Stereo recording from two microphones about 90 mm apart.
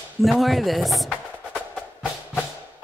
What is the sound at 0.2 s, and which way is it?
Speech, centre (ahead or behind).